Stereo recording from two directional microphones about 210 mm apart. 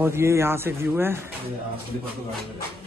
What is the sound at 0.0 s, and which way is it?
Speech, 10° right (ahead or behind).